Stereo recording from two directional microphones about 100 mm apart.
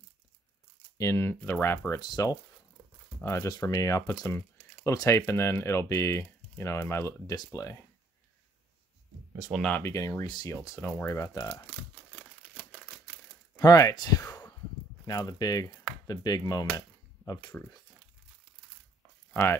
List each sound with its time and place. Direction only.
0.9 s speech: 30° left (ahead or behind)
1.3 s speech: 20° left (ahead or behind)
2.0 s speech: 40° left (ahead or behind)
3.6 s speech: 30° left (ahead or behind)
9.6 s speech: 10° left (ahead or behind)
9.8 s speech: 30° left (ahead or behind)
10.2 s speech: 45° left (ahead or behind)
10.5 s speech: 35° left (ahead or behind)
10.8 s speech: 20° left (ahead or behind)
12.2 s a sound: 15° left (ahead or behind)
13.6 s speech: 35° left (ahead or behind)
16.7 s cap gun: 30° left (ahead or behind)